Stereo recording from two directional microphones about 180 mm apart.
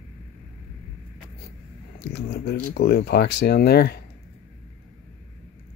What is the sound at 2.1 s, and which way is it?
Speech, 65° left (ahead or behind).